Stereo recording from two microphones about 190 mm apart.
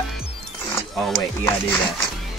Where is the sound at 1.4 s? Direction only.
15° left (ahead or behind).